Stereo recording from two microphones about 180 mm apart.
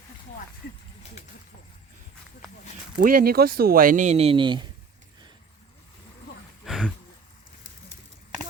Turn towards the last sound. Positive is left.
turn(degrees=0)  # may be behind; listen again after turning